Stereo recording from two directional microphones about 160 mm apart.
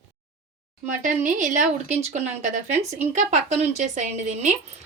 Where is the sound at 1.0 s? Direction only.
50° right (ahead or behind).